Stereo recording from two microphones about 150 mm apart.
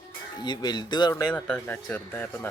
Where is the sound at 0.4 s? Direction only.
30° left (ahead or behind).